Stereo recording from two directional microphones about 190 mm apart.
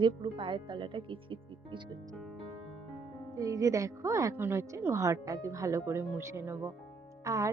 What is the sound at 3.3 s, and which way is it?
A woman's voice, 20° right (ahead or behind).